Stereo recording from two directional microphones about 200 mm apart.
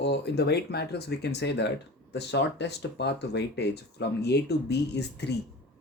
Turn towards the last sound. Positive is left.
turn(degrees=55)  # may be behind; listen again after turning